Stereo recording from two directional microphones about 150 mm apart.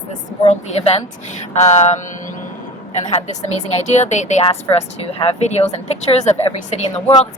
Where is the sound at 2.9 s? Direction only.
50° left (ahead or behind).